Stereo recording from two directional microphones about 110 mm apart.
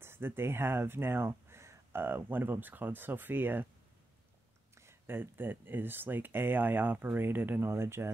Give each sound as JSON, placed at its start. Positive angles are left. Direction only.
{"t": 0.0, "sound": "speech", "side_deg": -20}
{"t": 4.7, "sound": "speech", "side_deg": -20}